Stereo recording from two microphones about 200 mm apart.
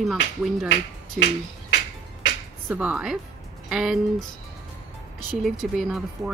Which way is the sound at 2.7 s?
5° right (ahead or behind).